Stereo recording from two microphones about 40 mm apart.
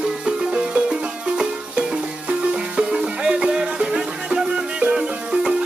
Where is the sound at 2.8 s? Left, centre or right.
Right.